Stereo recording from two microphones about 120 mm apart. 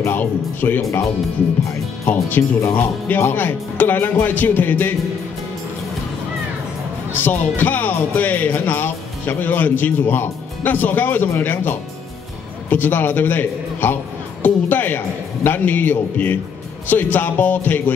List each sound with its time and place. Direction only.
0.0 s speech: 15° left (ahead or behind)
2.0 s speech: 15° left (ahead or behind)
7.2 s speech: 15° left (ahead or behind)
14.4 s music: 15° left (ahead or behind)
15.4 s speech: 15° left (ahead or behind)